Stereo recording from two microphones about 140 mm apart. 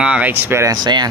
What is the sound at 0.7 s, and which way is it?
Speech, 30° right (ahead or behind).